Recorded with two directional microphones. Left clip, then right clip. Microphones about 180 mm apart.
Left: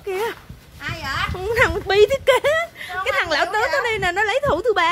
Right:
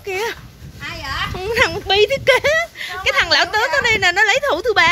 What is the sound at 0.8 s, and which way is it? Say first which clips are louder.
Children playing: even; centre (ahead or behind).